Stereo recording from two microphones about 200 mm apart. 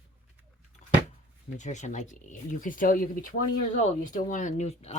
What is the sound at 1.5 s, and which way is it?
Speech, 35° left (ahead or behind).